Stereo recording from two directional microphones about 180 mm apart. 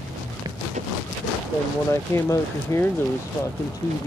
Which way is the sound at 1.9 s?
15° left (ahead or behind).